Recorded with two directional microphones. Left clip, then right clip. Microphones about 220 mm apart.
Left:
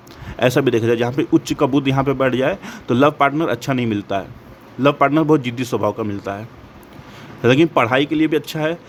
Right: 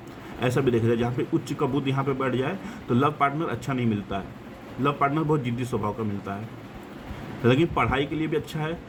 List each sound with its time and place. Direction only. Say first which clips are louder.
0.3 s speech: left 8 dB; 50° left (ahead or behind)
7.4 s speech: left 8 dB; 50° left (ahead or behind)